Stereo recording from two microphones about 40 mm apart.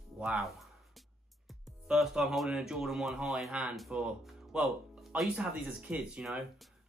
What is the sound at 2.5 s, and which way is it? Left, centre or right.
Speech, centre.